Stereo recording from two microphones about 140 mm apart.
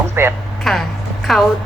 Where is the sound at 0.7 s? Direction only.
Centre (ahead or behind).